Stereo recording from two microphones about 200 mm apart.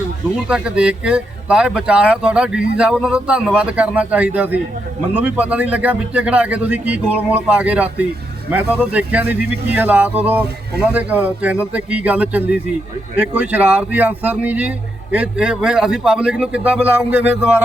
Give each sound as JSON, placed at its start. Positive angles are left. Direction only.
{"t": 0.4, "sound": "a man's voice", "side_deg": -5}